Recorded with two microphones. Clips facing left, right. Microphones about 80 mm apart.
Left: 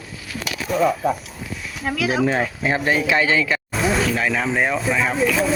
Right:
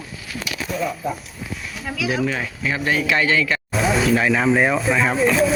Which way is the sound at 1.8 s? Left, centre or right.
Left.